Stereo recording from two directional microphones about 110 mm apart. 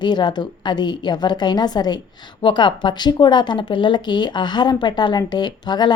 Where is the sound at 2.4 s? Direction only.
50° left (ahead or behind).